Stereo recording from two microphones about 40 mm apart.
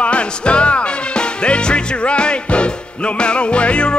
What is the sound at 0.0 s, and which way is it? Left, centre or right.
Music, left.